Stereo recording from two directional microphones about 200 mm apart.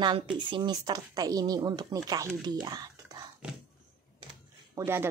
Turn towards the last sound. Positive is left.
turn(degrees=-15)  # may be behind; listen again after turning